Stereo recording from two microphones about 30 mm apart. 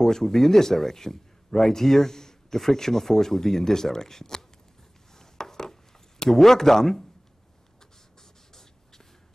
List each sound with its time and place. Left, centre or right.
0.0 s a man's voice: centre
5.1 s a sound: centre
8.2 s beatboxing: centre